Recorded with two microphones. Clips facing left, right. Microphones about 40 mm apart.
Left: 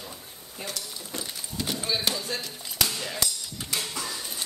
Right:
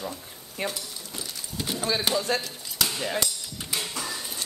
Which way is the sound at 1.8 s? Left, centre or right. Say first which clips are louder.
Right 4 dB; centre.